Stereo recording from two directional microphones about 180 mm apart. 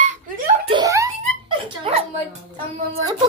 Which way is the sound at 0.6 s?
25° right (ahead or behind).